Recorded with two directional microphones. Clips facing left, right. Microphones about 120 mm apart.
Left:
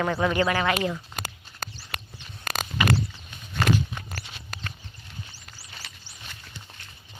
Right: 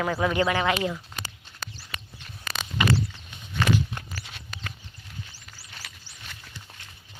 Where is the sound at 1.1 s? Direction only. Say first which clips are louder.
Left 3 dB; 45° left (ahead or behind).